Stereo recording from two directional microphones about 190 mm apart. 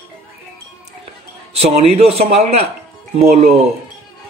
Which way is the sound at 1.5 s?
35° right (ahead or behind).